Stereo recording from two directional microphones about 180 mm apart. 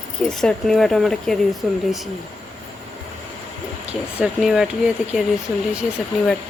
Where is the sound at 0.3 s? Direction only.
5° left (ahead or behind).